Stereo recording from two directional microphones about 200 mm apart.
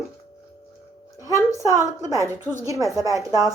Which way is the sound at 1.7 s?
15° right (ahead or behind).